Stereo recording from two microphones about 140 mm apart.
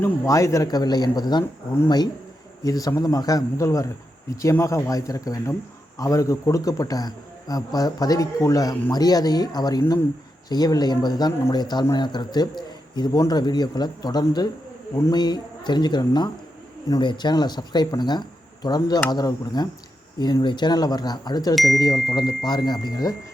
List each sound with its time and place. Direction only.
0.0 s speech: 20° left (ahead or behind)
2.6 s speech: 25° left (ahead or behind)